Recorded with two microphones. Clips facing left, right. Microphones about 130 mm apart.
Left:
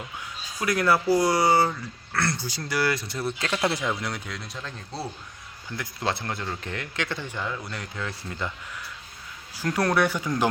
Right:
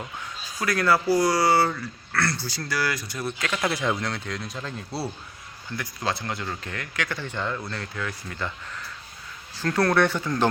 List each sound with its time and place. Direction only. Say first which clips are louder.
0.6 s speech: even; 20° left (ahead or behind)
4.0 s speech: right 2 dB; 5° left (ahead or behind)
5.7 s speech: even; 15° left (ahead or behind)
7.3 s speech: right 2 dB; 5° left (ahead or behind)
7.7 s speech: right 1 dB; 20° left (ahead or behind)
9.6 s speech: right 2 dB; 15° left (ahead or behind)